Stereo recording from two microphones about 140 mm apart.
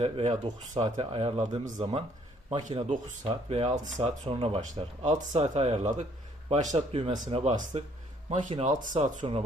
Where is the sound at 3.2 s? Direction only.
45° right (ahead or behind).